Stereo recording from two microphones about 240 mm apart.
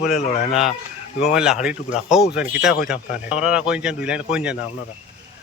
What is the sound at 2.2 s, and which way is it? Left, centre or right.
Speech, left.